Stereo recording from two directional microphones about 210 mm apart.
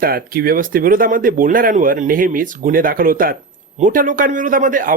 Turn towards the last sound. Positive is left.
turn(degrees=-40)  # may be behind; listen again after turning